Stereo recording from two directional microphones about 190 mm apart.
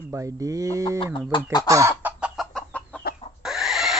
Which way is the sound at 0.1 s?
15° right (ahead or behind).